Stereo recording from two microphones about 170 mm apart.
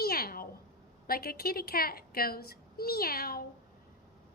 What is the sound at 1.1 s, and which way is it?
A woman's voice, 60° left (ahead or behind).